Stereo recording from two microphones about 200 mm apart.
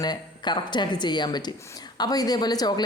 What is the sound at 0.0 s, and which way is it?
Speech, 20° left (ahead or behind).